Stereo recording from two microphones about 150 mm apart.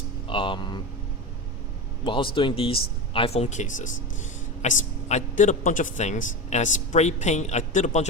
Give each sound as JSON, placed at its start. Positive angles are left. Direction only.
{"t": 0.3, "sound": "speech", "side_deg": 35}
{"t": 2.0, "sound": "a man's voice", "side_deg": 35}